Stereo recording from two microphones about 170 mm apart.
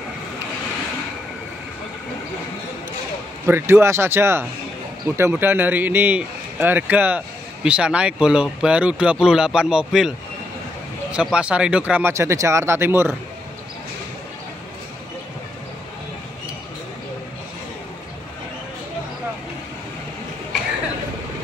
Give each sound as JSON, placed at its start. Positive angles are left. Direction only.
{"t": 3.4, "sound": "speech", "side_deg": -15}